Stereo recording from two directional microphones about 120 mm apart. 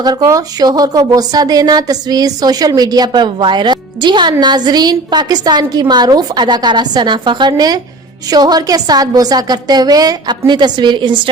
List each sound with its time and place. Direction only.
0.0 s a woman's voice: 30° right (ahead or behind)